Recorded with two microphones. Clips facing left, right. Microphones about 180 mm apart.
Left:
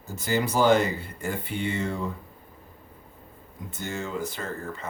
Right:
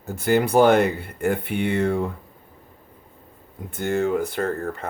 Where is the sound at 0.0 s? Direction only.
60° right (ahead or behind).